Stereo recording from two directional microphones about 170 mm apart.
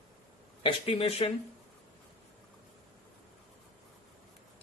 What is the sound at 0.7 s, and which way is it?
Speech, 35° left (ahead or behind).